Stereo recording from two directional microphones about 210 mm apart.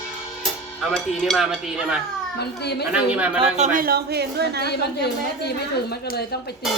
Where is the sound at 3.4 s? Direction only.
30° right (ahead or behind); by 4.6 s 50° right (ahead or behind).